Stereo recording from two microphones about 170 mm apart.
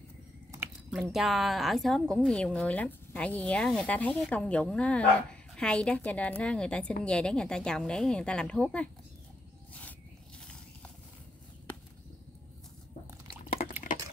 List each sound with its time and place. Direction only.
0.8 s speech: centre (ahead or behind)
13.6 s water: 40° left (ahead or behind)